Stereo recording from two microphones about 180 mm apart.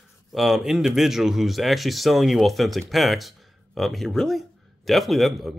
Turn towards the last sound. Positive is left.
turn(degrees=0)  # may be behind; listen again after turning